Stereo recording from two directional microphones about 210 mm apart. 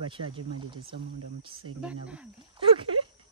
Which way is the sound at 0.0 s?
25° right (ahead or behind).